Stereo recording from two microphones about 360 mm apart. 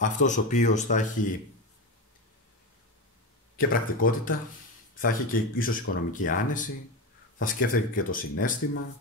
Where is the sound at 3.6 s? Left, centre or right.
Left.